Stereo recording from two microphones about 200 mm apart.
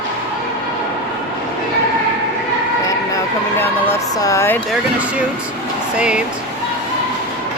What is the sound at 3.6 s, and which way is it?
Speech, 15° left (ahead or behind).